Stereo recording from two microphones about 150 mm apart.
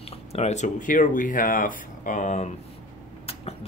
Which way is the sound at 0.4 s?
50° left (ahead or behind).